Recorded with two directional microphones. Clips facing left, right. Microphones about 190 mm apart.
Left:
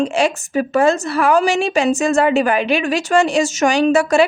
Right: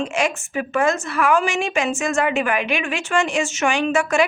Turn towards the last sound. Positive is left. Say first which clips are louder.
# left 6 dB
turn(degrees=35)  # may be behind; listen again after turning